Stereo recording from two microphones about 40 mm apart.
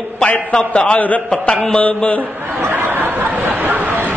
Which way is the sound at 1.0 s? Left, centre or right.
Left.